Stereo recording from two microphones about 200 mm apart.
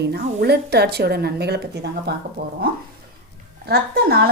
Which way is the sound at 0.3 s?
50° right (ahead or behind).